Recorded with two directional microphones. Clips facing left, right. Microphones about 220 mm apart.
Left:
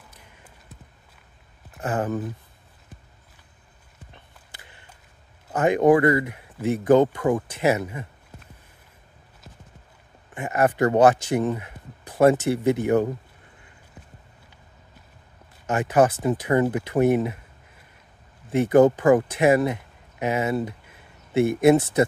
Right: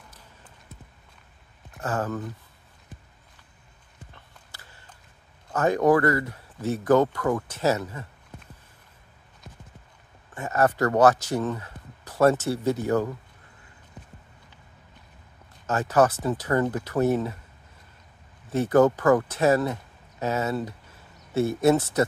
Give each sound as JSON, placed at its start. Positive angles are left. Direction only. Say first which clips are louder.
{"t": 1.8, "sound": "speech", "louder": "left 3 dB", "side_deg": 20}
{"t": 4.1, "sound": "a sound", "louder": "left 1 dB", "side_deg": 20}
{"t": 5.5, "sound": "speech", "louder": "left 3 dB", "side_deg": 15}
{"t": 10.3, "sound": "speech", "louder": "left 1 dB", "side_deg": 15}
{"t": 15.6, "sound": "speech", "louder": "left 2 dB", "side_deg": 15}
{"t": 18.5, "sound": "speech", "louder": "left 3 dB", "side_deg": 15}